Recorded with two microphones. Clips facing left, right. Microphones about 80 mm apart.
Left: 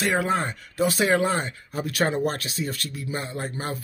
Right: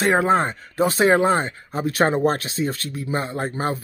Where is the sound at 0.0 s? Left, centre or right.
Right.